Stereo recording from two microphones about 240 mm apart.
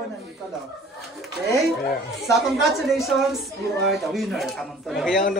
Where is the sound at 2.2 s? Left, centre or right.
Centre.